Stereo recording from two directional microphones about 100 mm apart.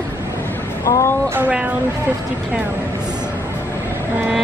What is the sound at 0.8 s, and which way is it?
Speech, 30° left (ahead or behind).